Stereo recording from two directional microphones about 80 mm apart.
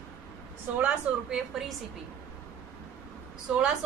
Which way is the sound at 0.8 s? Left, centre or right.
Centre.